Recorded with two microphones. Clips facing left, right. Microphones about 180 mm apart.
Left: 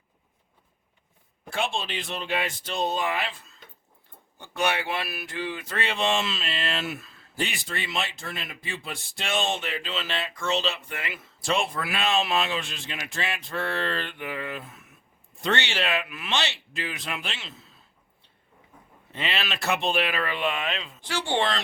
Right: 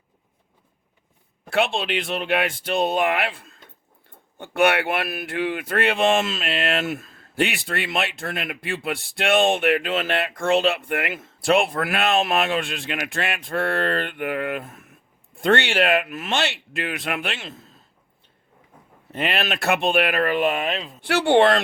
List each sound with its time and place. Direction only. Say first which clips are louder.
1.5 s speech: right 7 dB; 70° right (ahead or behind); by 17.7 s 50° right (ahead or behind)
19.1 s speech: right 6 dB; 50° right (ahead or behind)
21.0 s speech: right 11 dB; 65° right (ahead or behind)